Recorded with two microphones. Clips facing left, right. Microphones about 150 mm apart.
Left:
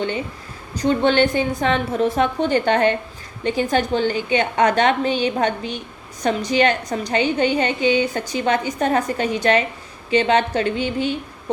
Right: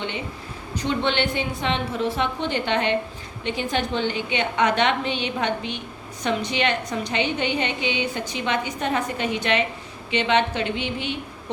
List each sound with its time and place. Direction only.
0.8 s a woman's voice: 40° left (ahead or behind)